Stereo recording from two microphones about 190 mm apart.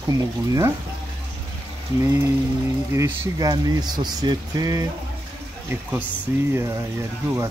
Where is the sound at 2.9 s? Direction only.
15° right (ahead or behind).